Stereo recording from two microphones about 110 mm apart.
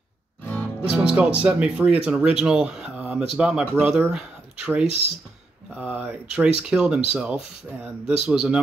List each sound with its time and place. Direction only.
0.8 s speech: 10° right (ahead or behind)